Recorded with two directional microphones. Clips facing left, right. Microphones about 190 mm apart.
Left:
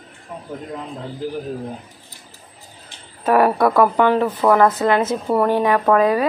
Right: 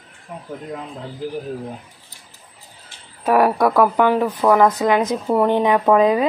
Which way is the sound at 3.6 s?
10° right (ahead or behind).